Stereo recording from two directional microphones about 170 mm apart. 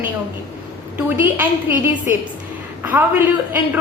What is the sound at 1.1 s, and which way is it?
A woman's voice, 10° right (ahead or behind).